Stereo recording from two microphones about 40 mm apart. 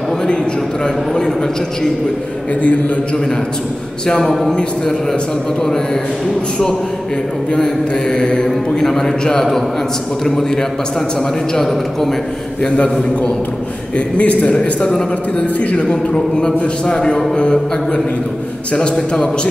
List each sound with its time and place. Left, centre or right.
0.8 s a man's voice: centre
7.5 s mantra: centre
13.9 s a man's voice: left
14.8 s mantra: centre
15.3 s a man's voice: left